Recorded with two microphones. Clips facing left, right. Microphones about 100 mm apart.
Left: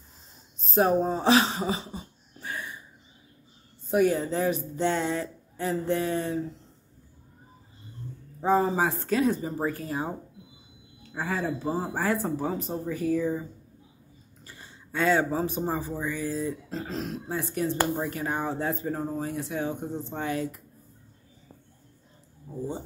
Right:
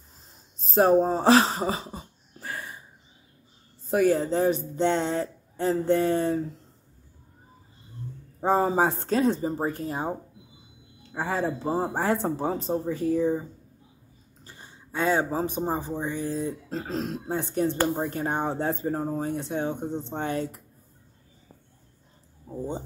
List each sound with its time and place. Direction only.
0.7 s a sound: 35° right (ahead or behind)
3.8 s speech: 35° right (ahead or behind)
8.4 s speech: 40° right (ahead or behind)
14.4 s speech: 20° right (ahead or behind)